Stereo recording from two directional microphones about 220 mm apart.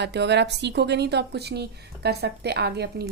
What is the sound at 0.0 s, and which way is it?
A woman's voice, 50° right (ahead or behind).